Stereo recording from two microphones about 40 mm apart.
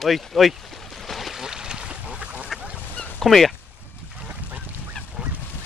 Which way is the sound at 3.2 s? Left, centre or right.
Centre.